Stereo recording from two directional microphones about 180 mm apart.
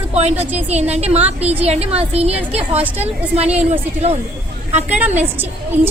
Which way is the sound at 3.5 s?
35° right (ahead or behind).